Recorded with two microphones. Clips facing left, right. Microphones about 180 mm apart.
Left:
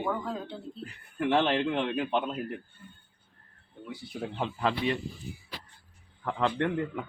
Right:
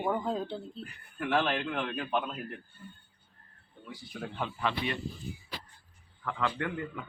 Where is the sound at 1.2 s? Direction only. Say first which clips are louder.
Left 4 dB; 25° left (ahead or behind).